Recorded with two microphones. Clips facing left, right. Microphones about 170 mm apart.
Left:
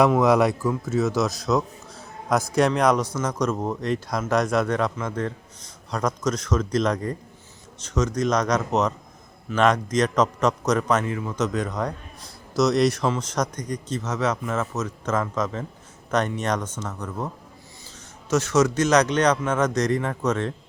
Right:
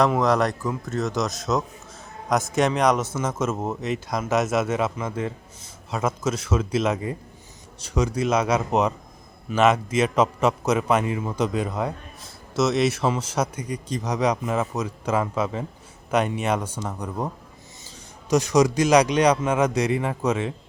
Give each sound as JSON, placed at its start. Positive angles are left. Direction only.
{"t": 0.1, "sound": "a man's voice", "side_deg": 10}